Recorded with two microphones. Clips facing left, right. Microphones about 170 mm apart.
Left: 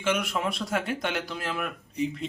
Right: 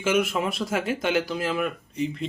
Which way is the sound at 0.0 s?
5° right (ahead or behind).